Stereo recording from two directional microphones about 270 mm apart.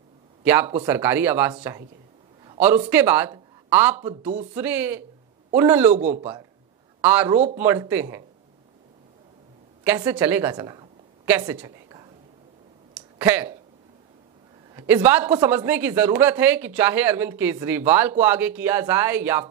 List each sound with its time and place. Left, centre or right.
0.4 s speech: centre
2.9 s speech: centre
9.8 s a woman's voice: centre
12.9 s a sound: centre
14.7 s speech: centre